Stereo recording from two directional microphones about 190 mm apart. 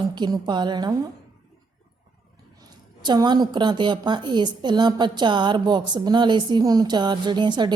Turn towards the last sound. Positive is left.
turn(degrees=-25)  # may be behind; listen again after turning